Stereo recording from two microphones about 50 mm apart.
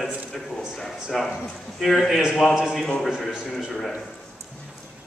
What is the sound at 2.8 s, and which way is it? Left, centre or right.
A man's voice, centre.